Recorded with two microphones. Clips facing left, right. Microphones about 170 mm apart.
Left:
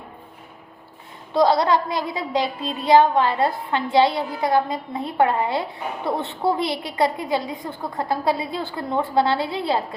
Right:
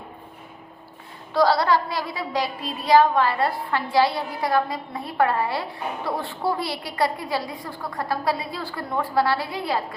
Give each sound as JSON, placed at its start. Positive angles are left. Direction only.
{"t": 1.3, "sound": "a woman's voice", "side_deg": 20}